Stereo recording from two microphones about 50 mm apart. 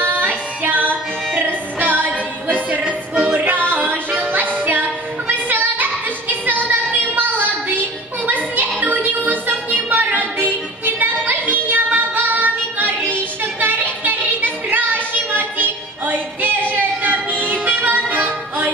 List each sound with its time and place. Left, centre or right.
0.0 s music: right
5.3 s a sound: right
11.7 s music: right